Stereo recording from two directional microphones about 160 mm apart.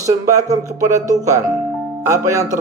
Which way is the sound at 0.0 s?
20° right (ahead or behind).